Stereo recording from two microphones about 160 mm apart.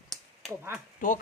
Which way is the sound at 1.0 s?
55° left (ahead or behind).